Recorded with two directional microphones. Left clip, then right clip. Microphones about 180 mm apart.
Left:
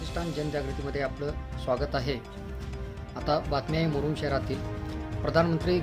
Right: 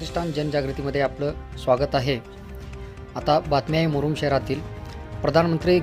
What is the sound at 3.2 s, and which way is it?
Speech, 40° right (ahead or behind).